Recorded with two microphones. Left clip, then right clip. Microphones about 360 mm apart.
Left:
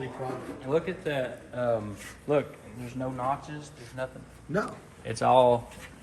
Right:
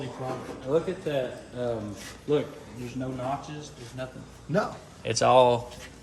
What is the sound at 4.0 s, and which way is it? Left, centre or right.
Speech, centre.